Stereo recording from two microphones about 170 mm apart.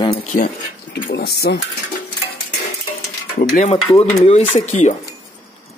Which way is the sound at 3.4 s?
45° left (ahead or behind).